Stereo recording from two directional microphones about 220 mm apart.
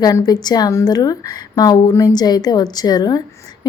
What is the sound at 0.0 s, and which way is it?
Speech, 15° left (ahead or behind).